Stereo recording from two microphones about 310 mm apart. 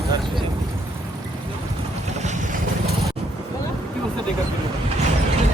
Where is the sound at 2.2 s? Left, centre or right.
Right.